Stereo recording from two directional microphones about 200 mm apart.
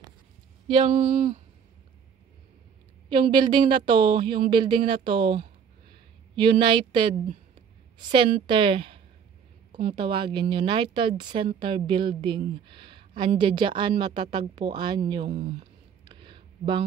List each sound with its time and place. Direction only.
0.7 s speech: 35° right (ahead or behind)
3.1 s a woman's voice: 25° right (ahead or behind)
15.3 s speech: 40° right (ahead or behind)
16.1 s a sound: 25° right (ahead or behind)